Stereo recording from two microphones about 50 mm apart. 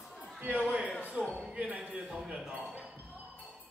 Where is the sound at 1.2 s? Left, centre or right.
Right.